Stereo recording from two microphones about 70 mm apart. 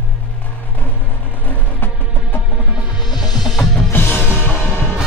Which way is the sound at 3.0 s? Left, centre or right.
Left.